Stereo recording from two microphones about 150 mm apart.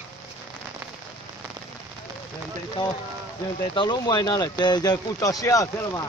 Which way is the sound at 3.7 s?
30° left (ahead or behind).